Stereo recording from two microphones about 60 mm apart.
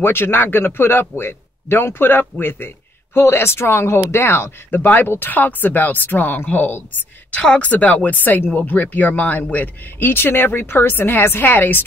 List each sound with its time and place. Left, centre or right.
0.0 s speech: left
3.2 s speech: left
7.4 s speech: left